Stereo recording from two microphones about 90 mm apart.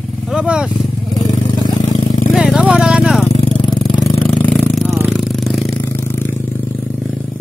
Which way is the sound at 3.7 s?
50° left (ahead or behind).